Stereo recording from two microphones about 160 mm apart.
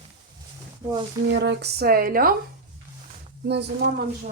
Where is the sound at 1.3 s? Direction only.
90° right; by 2.3 s 65° right (ahead or behind).